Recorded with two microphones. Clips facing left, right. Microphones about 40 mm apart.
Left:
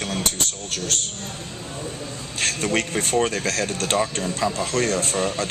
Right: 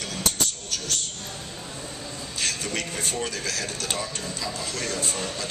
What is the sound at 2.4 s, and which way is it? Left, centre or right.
Speech, left.